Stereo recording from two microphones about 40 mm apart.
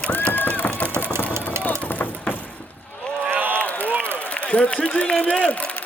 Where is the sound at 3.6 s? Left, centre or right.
Left.